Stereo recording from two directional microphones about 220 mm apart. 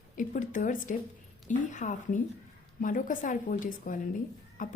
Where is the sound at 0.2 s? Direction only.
35° left (ahead or behind).